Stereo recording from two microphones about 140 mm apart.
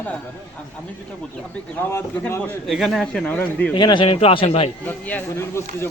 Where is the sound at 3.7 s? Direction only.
35° left (ahead or behind).